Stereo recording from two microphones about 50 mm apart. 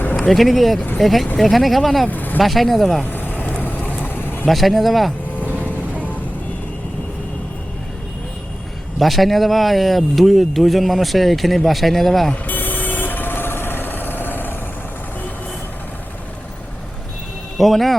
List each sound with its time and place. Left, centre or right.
0.2 s speech: centre
2.0 s speech: left
2.4 s speech: centre
3.1 s vehicle: left
4.4 s speech: centre
9.0 s speech: centre
12.5 s vehicle: left
17.6 s speech: centre